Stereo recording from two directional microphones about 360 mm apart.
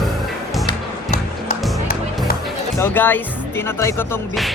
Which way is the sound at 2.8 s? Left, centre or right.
Centre.